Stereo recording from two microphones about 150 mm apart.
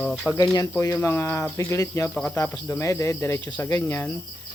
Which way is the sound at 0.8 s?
15° left (ahead or behind).